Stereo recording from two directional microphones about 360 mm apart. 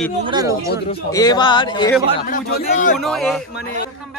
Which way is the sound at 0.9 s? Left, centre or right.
Centre.